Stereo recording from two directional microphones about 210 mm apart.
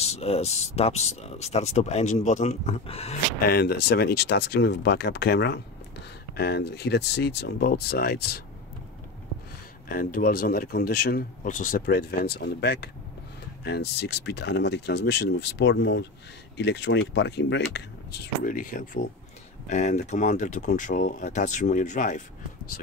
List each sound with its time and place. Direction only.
0.0 s speech: 30° left (ahead or behind)
3.4 s speech: 45° left (ahead or behind)
9.8 s speech: 45° left (ahead or behind)